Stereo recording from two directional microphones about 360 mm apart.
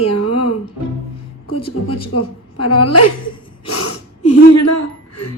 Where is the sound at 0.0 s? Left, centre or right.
Left.